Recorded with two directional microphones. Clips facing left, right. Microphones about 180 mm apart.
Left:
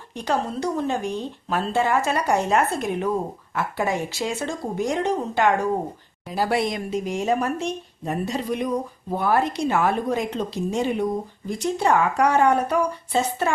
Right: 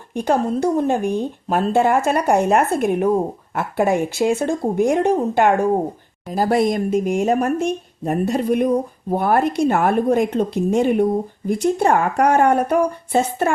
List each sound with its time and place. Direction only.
0.1 s speech: 55° right (ahead or behind)